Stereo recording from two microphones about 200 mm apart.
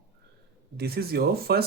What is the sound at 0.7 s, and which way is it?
Speech, 50° right (ahead or behind).